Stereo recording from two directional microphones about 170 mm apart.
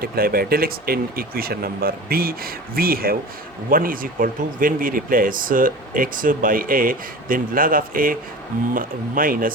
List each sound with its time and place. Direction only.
0.0 s speech: 60° right (ahead or behind)